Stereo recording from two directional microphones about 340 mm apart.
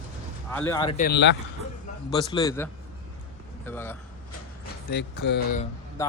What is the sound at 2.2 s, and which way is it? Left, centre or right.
A man's voice, centre.